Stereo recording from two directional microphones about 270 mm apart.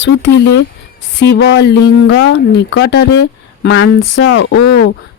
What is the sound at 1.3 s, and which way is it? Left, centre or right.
Speech, left.